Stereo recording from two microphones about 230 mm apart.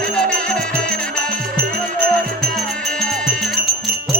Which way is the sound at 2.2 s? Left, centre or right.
Right.